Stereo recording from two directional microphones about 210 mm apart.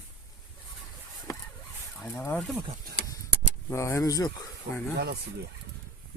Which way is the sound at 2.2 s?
10° left (ahead or behind).